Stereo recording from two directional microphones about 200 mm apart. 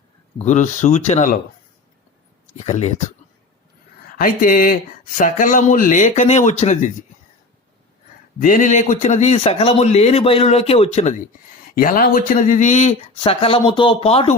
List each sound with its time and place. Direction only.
0.3 s a man's voice: 35° left (ahead or behind)
2.6 s a man's voice: 35° left (ahead or behind)
4.2 s a man's voice: 45° left (ahead or behind)
8.4 s a man's voice: 40° left (ahead or behind)
11.7 s a man's voice: 45° left (ahead or behind)